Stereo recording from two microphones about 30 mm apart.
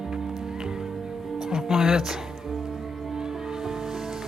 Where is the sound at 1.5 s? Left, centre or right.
Centre.